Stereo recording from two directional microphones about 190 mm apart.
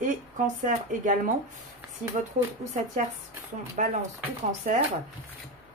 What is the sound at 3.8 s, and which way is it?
Speech, 40° right (ahead or behind).